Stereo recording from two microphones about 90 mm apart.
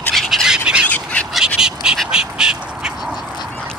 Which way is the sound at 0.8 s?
15° left (ahead or behind).